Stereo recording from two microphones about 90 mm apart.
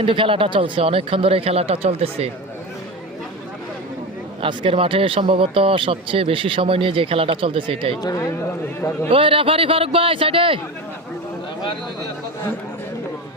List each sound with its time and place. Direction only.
0.0 s speech: 75° right (ahead or behind)
4.4 s speech: 80° right
8.0 s speech: 40° left (ahead or behind)
9.0 s a man's voice: 80° right